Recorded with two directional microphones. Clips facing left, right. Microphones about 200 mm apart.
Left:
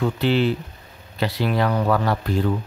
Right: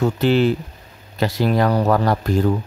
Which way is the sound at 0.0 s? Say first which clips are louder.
Right 3 dB; 45° right (ahead or behind).